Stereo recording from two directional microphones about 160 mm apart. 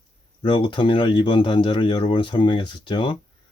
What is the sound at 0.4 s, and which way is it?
Speech, 30° left (ahead or behind).